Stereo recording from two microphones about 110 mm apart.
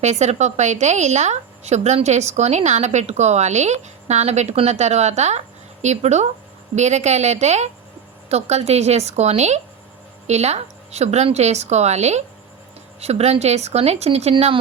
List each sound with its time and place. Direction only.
0.0 s a woman's voice: 90° right
13.0 s a woman's voice: 75° right (ahead or behind)